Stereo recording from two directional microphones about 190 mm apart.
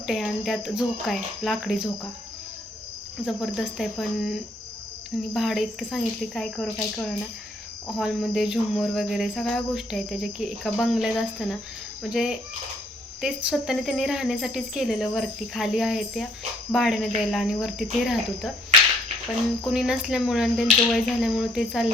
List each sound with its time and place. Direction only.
0.1 s cricket: centre (ahead or behind)
3.2 s cricket: centre (ahead or behind)
7.9 s cricket: centre (ahead or behind)
19.6 s cricket: centre (ahead or behind)